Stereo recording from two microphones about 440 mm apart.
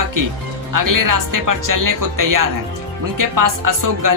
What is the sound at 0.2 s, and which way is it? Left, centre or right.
Speech, right.